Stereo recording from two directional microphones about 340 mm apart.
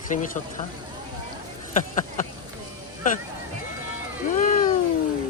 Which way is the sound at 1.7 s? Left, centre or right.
Left.